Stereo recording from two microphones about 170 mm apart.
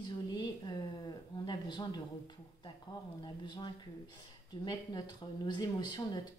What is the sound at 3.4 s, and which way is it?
Speech, 30° left (ahead or behind).